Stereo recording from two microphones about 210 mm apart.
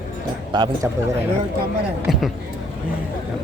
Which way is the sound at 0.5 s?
20° right (ahead or behind).